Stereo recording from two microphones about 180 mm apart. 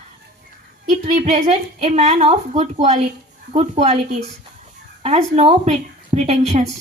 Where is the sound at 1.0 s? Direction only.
40° right (ahead or behind).